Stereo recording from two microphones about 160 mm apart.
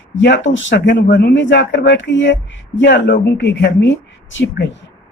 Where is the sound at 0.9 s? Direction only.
90° left.